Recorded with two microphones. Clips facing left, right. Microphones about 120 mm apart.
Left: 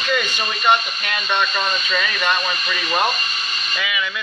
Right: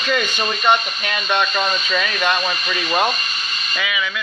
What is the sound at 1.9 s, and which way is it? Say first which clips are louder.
Speech: even; 15° right (ahead or behind).